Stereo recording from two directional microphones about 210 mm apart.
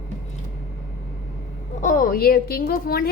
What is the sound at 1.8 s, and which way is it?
A woman's voice, 40° left (ahead or behind).